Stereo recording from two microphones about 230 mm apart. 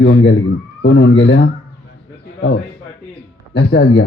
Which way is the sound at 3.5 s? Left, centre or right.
Left.